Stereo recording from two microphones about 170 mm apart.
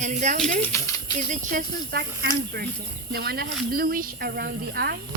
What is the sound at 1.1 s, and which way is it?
Speech, 50° right (ahead or behind).